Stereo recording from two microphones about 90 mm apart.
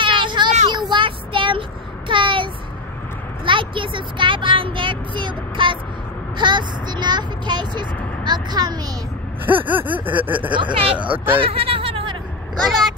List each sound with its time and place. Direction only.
0.0 s child singing: 65° right (ahead or behind)
2.0 s a sound: 65° right (ahead or behind)
3.4 s vehicle: 65° right (ahead or behind); by 8.7 s 50° right (ahead or behind)
9.5 s snicker: 20° right (ahead or behind)
10.5 s speech: 75° right (ahead or behind)
11.0 s snicker: 20° right (ahead or behind)
11.4 s a sound: 90° right